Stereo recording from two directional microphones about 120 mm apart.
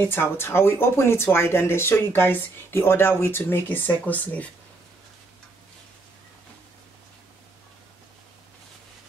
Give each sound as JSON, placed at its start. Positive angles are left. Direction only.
{"t": 0.0, "sound": "speech", "side_deg": 20}